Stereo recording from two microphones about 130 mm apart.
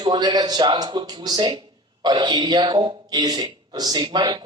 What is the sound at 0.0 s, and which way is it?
Speech, 35° right (ahead or behind).